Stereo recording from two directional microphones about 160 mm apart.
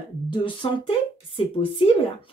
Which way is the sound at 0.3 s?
30° left (ahead or behind).